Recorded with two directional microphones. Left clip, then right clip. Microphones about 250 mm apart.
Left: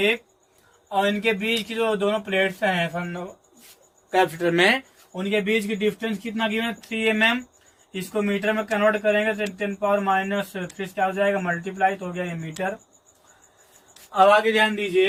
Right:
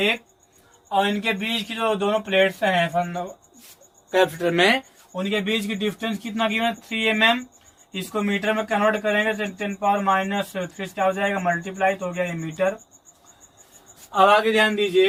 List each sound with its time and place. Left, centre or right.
0.9 s speech: centre
14.1 s speech: centre